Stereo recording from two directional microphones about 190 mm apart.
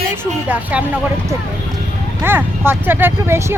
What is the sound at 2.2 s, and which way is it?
Speech, 10° right (ahead or behind).